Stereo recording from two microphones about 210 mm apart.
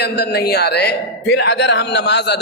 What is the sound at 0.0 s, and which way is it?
A man's voice, 50° left (ahead or behind).